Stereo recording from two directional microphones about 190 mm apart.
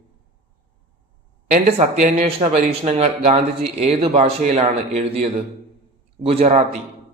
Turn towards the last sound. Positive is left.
turn(degrees=-35)  # may be behind; listen again after turning